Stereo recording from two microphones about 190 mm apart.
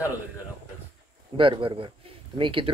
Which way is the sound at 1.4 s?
25° right (ahead or behind).